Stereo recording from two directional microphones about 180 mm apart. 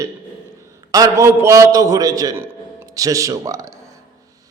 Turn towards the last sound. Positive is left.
turn(degrees=-20)  # may be behind; listen again after turning